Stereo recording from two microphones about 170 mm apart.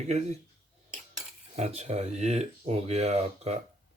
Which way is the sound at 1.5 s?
40° right (ahead or behind).